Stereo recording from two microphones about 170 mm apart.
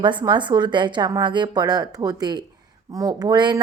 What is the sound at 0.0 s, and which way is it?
A woman's voice, 25° right (ahead or behind).